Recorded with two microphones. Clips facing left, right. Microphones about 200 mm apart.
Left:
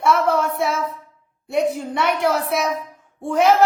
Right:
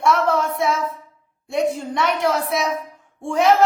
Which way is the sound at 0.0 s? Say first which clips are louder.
Even; 5° left (ahead or behind).